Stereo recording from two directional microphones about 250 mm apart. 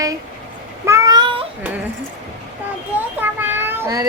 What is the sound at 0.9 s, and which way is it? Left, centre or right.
Child singing, centre.